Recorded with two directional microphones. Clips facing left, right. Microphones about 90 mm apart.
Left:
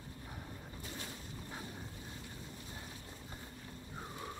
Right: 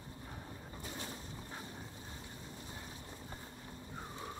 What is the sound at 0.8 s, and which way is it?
Pigeon, 30° right (ahead or behind).